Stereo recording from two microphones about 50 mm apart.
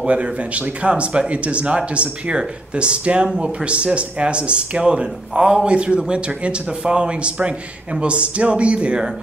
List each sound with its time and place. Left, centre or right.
0.0 s speech: right